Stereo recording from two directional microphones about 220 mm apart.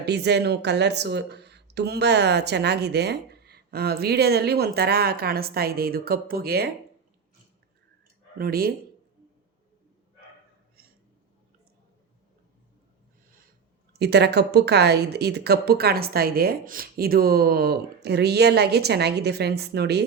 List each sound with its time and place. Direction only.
0.0 s speech: 50° right (ahead or behind)
8.4 s speech: 45° right (ahead or behind)
14.0 s speech: 50° right (ahead or behind)